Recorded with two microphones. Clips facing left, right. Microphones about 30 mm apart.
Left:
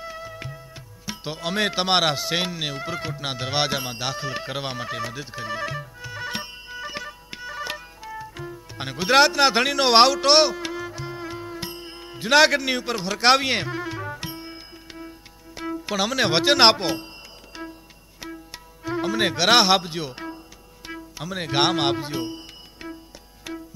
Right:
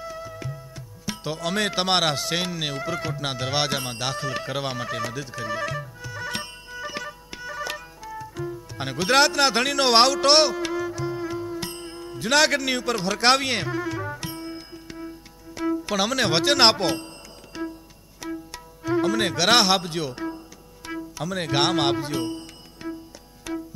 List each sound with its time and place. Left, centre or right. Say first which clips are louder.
0.0 s music: even; left
1.2 s speech: left 1 dB; centre
6.5 s music: even; centre
8.8 s speech: left 2 dB; centre; by 11.6 s left
11.8 s music: right 2 dB; left
12.2 s music: left 3 dB; centre
16.0 s speech: left 2 dB; centre
17.5 s music: right 5 dB; centre
20.9 s music: right 4 dB; centre
21.5 s speech: left 1 dB; centre
22.4 s music: right 2 dB; centre